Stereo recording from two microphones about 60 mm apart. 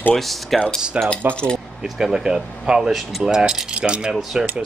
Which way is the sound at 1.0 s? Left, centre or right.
Right.